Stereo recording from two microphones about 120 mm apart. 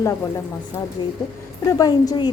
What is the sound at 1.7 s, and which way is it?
Speech, 30° left (ahead or behind).